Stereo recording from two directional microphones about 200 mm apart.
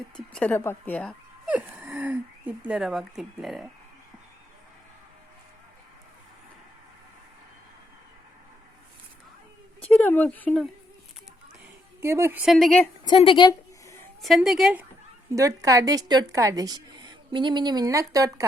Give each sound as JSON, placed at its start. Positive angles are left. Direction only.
{"t": 0.3, "sound": "speech", "side_deg": 5}
{"t": 1.5, "sound": "speech", "side_deg": -5}
{"t": 9.8, "sound": "speech", "side_deg": 10}
{"t": 11.9, "sound": "a woman's voice", "side_deg": -15}
{"t": 13.1, "sound": "a sound", "side_deg": 25}
{"t": 14.2, "sound": "a woman's voice", "side_deg": 0}
{"t": 15.3, "sound": "a woman's voice", "side_deg": -15}